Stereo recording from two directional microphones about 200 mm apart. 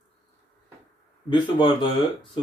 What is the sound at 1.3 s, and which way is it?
Speech, 25° left (ahead or behind).